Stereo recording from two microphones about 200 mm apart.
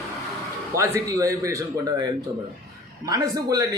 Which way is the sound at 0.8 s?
15° right (ahead or behind).